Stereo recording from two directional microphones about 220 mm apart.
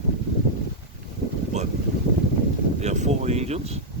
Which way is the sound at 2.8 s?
30° right (ahead or behind).